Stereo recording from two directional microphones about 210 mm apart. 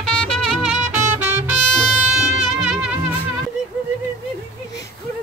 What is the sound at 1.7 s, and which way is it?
Music, centre (ahead or behind).